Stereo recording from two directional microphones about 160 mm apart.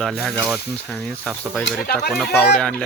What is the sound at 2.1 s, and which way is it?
Speech, 5° left (ahead or behind).